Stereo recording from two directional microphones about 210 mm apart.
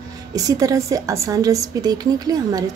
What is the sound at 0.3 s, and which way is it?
A woman's voice, 15° right (ahead or behind).